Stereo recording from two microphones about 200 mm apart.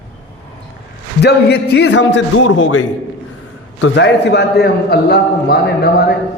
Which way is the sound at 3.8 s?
60° left (ahead or behind).